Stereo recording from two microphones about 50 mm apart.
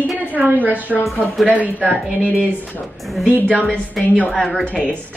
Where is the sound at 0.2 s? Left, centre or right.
Right.